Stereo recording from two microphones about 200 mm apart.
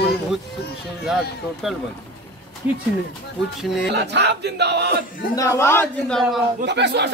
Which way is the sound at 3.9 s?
55° right (ahead or behind).